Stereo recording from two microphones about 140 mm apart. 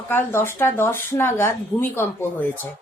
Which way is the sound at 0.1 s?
15° left (ahead or behind).